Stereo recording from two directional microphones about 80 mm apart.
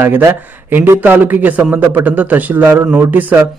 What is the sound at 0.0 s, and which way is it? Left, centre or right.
A man's voice, right.